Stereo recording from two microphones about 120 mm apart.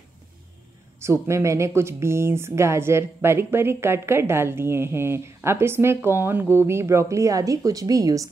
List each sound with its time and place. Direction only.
0.9 s speech: 20° right (ahead or behind)